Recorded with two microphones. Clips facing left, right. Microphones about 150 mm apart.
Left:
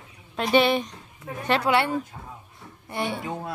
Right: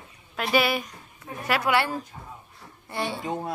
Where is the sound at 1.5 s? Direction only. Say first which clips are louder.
Left 2 dB; 25° left (ahead or behind).